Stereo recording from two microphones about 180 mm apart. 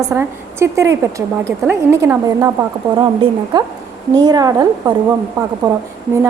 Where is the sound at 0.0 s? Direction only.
15° right (ahead or behind).